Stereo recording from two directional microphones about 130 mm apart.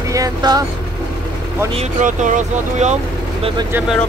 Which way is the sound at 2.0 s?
75° right (ahead or behind).